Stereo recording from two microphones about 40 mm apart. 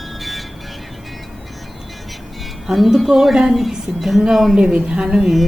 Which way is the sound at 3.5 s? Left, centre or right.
Centre.